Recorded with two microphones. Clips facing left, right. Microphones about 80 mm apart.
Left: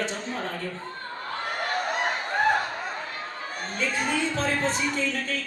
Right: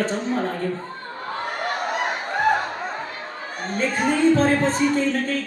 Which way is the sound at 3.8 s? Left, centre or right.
Right.